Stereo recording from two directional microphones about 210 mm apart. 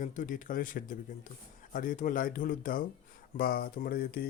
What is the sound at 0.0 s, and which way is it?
Speech, 40° left (ahead or behind).